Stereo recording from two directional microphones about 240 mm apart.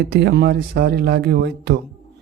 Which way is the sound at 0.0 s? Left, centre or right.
Right.